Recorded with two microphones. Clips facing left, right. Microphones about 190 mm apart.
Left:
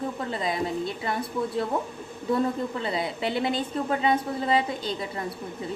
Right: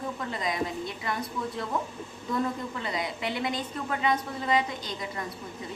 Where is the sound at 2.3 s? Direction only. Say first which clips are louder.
Left 4 dB; 30° left (ahead or behind).